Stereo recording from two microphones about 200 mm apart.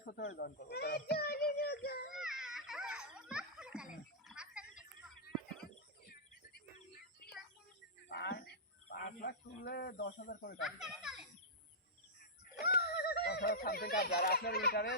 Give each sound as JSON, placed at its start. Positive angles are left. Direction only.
{"t": 0.0, "sound": "a child's voice", "side_deg": 65}
{"t": 2.1, "sound": "baby cry", "side_deg": 0}
{"t": 6.1, "sound": "a sound", "side_deg": 50}
{"t": 8.1, "sound": "a sound", "side_deg": 55}
{"t": 10.8, "sound": "children playing", "side_deg": 0}
{"t": 12.6, "sound": "speech", "side_deg": 55}